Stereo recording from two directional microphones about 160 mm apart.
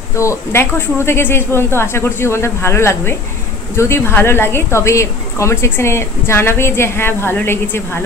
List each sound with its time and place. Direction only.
0.1 s a woman's voice: 20° left (ahead or behind)